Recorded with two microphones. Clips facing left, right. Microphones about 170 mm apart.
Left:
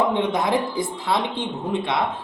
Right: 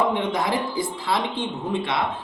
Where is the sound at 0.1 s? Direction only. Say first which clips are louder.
Left 2 dB; 20° left (ahead or behind).